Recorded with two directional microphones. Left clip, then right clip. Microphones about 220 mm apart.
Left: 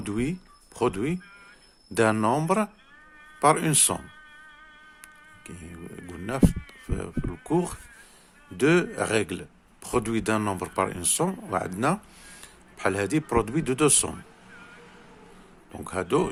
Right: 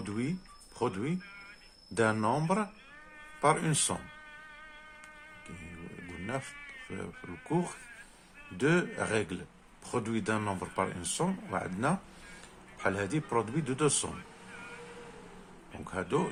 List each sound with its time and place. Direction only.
0.0 s speech: 45° left (ahead or behind)
6.1 s sheep: 45° left (ahead or behind)
6.9 s speech: 45° left (ahead or behind)
15.7 s speech: 50° left (ahead or behind)